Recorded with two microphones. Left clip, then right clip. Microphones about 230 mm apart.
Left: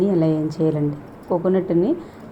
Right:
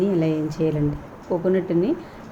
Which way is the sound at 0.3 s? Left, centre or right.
Centre.